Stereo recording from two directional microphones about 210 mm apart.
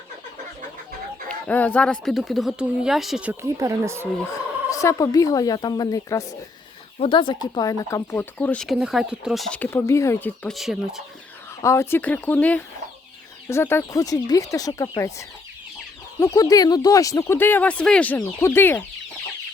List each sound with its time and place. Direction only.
1.3 s speech: 5° left (ahead or behind); by 4.1 s 10° right (ahead or behind)
4.3 s speech: 15° left (ahead or behind); by 11.0 s centre (ahead or behind)
11.6 s speech: 15° left (ahead or behind)
16.2 s speech: 15° left (ahead or behind)